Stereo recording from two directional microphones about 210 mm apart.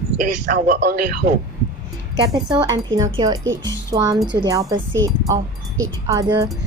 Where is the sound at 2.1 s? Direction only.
20° right (ahead or behind).